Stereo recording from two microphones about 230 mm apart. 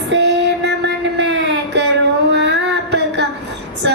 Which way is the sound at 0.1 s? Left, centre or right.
Right.